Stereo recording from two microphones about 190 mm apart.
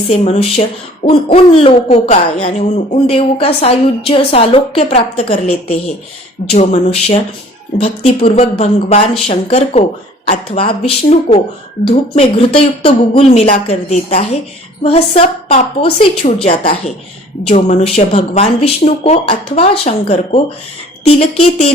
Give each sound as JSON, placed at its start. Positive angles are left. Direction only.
{"t": 0.1, "sound": "hoot", "side_deg": 30}